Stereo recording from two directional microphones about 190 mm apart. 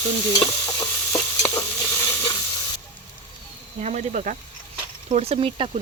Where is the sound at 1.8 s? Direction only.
15° left (ahead or behind).